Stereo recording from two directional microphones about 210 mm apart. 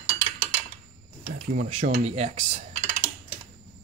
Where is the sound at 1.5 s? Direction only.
35° right (ahead or behind).